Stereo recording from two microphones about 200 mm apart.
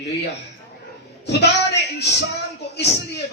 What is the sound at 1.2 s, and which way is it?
Speech, 55° left (ahead or behind).